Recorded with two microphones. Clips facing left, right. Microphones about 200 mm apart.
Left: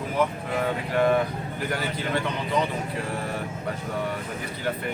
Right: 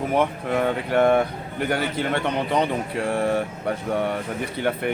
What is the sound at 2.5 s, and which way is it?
Speech, 55° right (ahead or behind).